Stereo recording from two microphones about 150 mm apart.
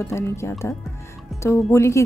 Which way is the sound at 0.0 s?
15° left (ahead or behind).